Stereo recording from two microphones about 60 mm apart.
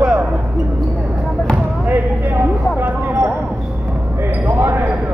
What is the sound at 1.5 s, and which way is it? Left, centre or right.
Basketball bounce, right.